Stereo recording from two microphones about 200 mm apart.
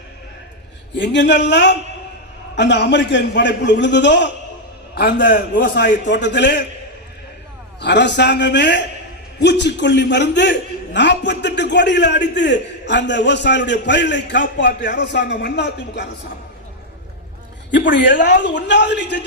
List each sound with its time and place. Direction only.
0.9 s a man's voice: 60° left (ahead or behind)
4.9 s a man's voice: 50° left (ahead or behind)
7.8 s a man's voice: 60° left (ahead or behind)
17.7 s a man's voice: 60° left (ahead or behind)